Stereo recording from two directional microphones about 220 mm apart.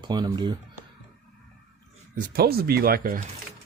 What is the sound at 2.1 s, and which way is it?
Speech, 40° right (ahead or behind).